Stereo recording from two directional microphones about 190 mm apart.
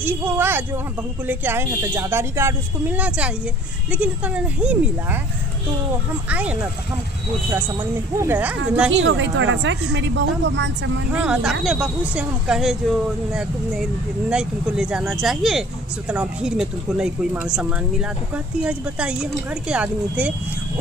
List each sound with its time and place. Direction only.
0.0 s speech: 10° right (ahead or behind)
6.2 s speech: 5° right (ahead or behind)
8.2 s speech: 10° right (ahead or behind)
8.9 s a woman's voice: 75° right (ahead or behind)
11.1 s speech: 5° right (ahead or behind)